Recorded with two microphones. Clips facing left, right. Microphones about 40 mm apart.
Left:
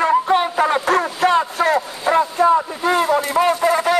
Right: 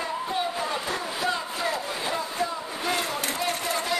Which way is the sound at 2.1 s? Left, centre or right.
Left.